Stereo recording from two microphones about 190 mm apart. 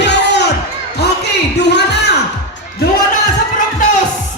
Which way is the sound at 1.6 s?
60° left (ahead or behind).